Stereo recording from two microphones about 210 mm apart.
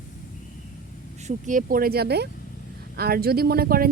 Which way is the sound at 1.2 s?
35° right (ahead or behind).